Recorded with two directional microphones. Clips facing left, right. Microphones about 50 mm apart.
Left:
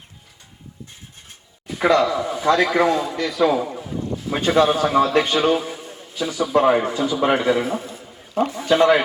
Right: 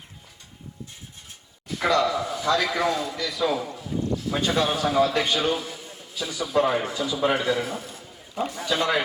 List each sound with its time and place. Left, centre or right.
1.6 s a man's voice: left